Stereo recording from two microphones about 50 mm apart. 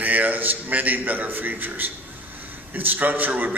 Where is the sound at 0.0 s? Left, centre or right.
Right.